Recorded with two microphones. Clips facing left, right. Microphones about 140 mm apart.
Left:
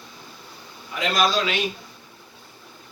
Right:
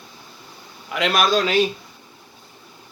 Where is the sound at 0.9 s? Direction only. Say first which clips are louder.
Right 5 dB; 75° right (ahead or behind).